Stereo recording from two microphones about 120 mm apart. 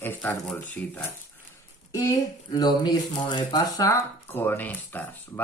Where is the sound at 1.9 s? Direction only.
30° left (ahead or behind).